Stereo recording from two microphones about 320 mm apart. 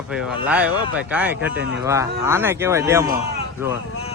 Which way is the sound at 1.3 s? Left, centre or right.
Right.